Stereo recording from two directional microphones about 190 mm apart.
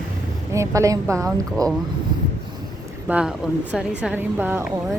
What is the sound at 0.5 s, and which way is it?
Speech, 15° right (ahead or behind).